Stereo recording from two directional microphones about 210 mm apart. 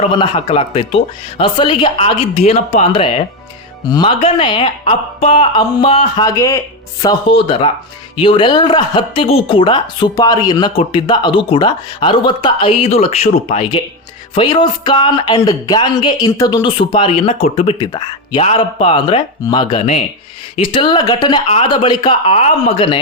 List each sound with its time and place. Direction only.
0.0 s speech: 25° left (ahead or behind)